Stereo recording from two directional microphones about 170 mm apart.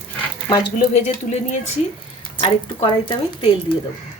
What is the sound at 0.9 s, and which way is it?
Speech, 40° left (ahead or behind).